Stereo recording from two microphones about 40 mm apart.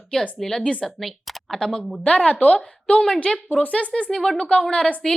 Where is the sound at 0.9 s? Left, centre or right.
Centre.